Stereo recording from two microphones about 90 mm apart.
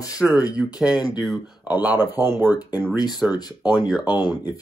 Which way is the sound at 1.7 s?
20° right (ahead or behind).